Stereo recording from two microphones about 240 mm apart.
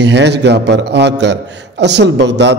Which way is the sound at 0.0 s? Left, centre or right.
Right.